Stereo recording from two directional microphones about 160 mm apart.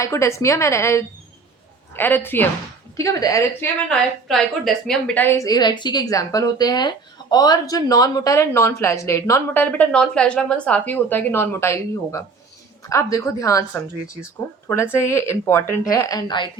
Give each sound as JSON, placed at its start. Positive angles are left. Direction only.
{"t": 0.0, "sound": "a woman's voice", "side_deg": 20}
{"t": 3.8, "sound": "a woman's voice", "side_deg": 5}